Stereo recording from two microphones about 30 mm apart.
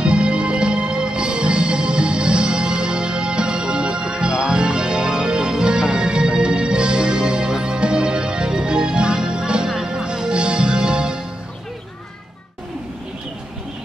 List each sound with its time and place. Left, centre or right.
0.0 s music: right